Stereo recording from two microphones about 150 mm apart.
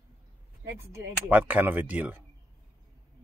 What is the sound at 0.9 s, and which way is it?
Speech, 15° right (ahead or behind).